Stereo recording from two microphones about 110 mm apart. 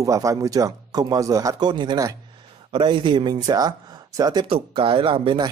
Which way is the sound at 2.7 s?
50° right (ahead or behind).